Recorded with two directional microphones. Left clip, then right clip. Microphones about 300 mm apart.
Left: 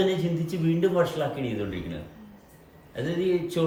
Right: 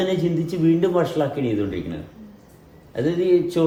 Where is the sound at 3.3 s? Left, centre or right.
Centre.